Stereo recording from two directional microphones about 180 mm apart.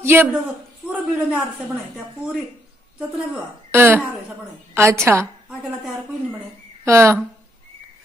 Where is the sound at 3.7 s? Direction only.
10° right (ahead or behind).